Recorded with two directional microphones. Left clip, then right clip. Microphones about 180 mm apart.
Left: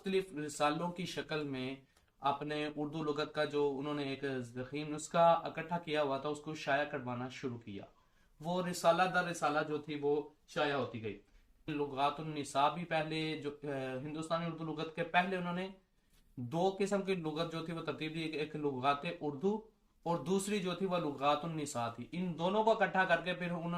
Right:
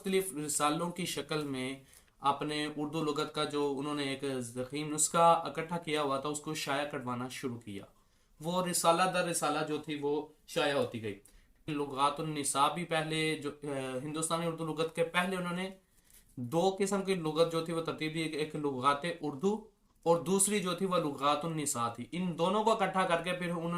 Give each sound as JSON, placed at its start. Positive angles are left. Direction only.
{"t": 0.0, "sound": "speech", "side_deg": -15}
{"t": 8.4, "sound": "speech", "side_deg": -15}
{"t": 11.9, "sound": "speech", "side_deg": -15}